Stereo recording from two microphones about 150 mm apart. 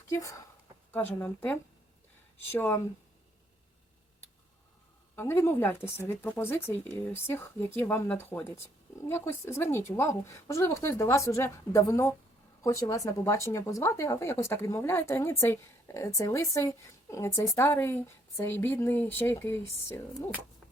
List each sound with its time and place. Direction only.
0.1 s speech: 20° left (ahead or behind)
5.1 s speech: 15° left (ahead or behind)